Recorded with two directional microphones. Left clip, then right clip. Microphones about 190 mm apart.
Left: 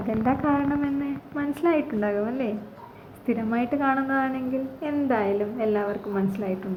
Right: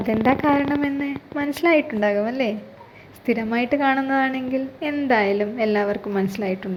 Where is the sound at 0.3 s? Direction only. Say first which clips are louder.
Right 5 dB; 25° right (ahead or behind).